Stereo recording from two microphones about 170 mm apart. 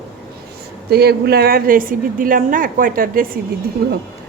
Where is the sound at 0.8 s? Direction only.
70° right (ahead or behind).